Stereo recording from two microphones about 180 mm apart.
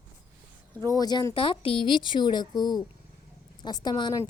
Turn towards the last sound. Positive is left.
turn(degrees=25)  # may be behind; listen again after turning